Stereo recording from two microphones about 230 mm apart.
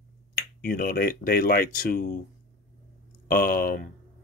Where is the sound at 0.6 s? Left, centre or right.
Left.